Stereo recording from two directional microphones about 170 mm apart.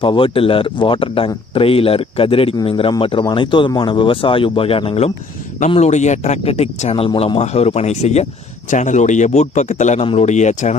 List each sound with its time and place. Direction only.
0.0 s a man's voice: 30° left (ahead or behind)